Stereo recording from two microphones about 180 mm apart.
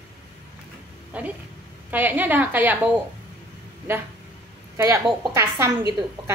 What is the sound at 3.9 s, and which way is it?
A woman's voice, 15° right (ahead or behind).